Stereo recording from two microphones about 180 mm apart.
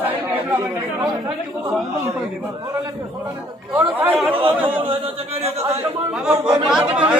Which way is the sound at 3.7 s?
10° right (ahead or behind).